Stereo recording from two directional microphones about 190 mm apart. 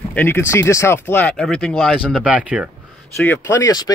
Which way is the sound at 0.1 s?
10° left (ahead or behind).